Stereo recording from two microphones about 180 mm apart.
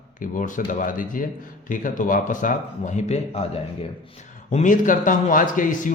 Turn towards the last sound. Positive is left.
turn(degrees=45)  # may be behind; listen again after turning